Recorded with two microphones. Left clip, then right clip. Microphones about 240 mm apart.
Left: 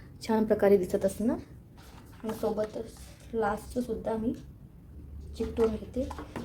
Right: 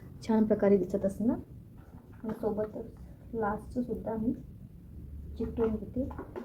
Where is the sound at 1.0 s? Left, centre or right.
Left.